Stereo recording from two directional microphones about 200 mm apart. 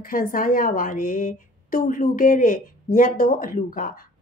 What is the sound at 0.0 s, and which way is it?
A woman's voice, 45° left (ahead or behind).